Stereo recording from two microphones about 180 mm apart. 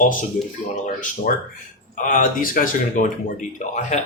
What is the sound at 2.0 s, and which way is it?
Speech, 50° left (ahead or behind).